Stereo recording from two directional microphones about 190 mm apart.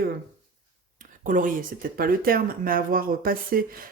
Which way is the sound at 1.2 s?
45° right (ahead or behind).